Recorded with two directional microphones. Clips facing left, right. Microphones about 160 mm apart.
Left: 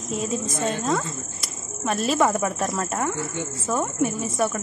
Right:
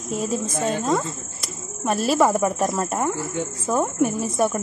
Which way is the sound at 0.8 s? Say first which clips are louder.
Right 2 dB; 5° right (ahead or behind).